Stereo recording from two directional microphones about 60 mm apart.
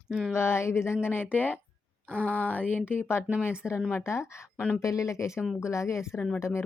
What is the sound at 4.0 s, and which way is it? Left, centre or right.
Speech, left.